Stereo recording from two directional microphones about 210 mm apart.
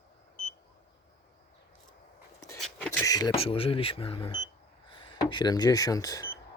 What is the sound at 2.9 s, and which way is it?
Speech, 15° left (ahead or behind).